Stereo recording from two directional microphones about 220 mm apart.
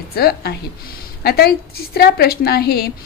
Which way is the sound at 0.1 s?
45° left (ahead or behind).